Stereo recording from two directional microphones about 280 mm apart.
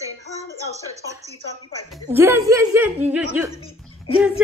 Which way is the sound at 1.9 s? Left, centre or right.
Centre.